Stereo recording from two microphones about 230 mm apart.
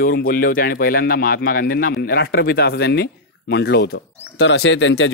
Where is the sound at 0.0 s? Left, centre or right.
Left.